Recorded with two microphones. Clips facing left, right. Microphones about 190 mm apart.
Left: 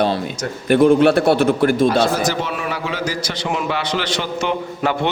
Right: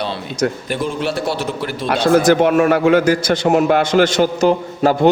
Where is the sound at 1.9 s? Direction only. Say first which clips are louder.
Right 5 dB; 60° right (ahead or behind).